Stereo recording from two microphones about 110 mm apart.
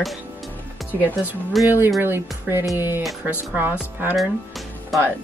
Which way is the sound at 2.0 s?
20° right (ahead or behind).